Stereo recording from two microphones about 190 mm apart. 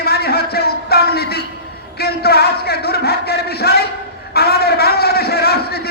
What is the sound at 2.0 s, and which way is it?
Speech, 55° left (ahead or behind).